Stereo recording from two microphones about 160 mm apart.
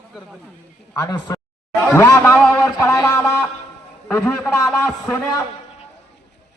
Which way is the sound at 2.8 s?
20° left (ahead or behind).